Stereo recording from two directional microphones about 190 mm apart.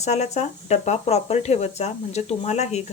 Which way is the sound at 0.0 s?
35° left (ahead or behind).